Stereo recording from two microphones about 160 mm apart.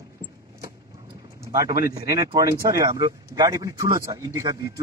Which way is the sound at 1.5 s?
20° right (ahead or behind).